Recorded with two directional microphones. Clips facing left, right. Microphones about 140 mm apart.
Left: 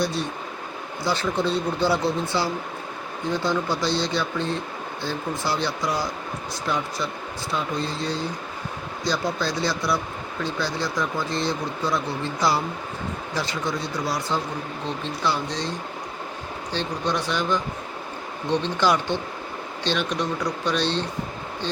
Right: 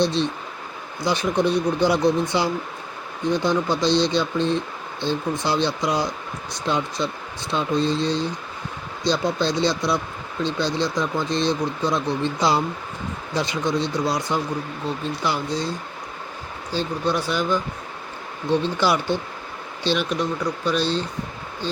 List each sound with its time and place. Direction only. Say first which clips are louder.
0.0 s speech: right 4 dB; 25° right (ahead or behind)
16.7 s speech: right 3 dB; 5° right (ahead or behind)
18.8 s speech: right 1 dB; 10° right (ahead or behind)